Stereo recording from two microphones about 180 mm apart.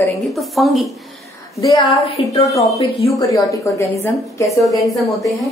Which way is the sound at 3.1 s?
20° left (ahead or behind).